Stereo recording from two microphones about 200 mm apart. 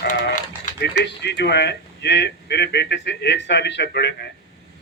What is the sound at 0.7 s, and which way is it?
Speech, 60° left (ahead or behind).